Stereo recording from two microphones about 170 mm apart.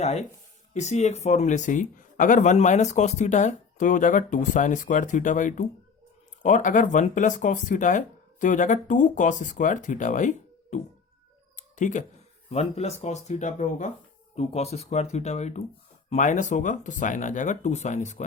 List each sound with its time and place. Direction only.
0.0 s speech: 40° left (ahead or behind)
11.5 s a sound: 45° left (ahead or behind)
12.5 s speech: 40° left (ahead or behind)